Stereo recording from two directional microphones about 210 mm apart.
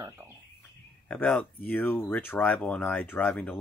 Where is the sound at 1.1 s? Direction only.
5° left (ahead or behind).